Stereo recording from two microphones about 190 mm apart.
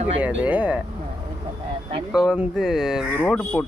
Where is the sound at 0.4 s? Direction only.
5° right (ahead or behind).